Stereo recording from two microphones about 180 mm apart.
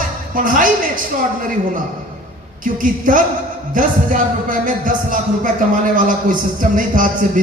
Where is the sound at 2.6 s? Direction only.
50° right (ahead or behind).